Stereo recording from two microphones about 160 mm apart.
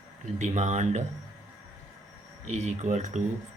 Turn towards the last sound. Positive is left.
turn(degrees=-45)  # may be behind; listen again after turning